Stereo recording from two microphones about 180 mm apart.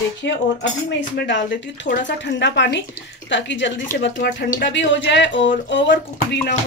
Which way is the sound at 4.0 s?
75° left (ahead or behind).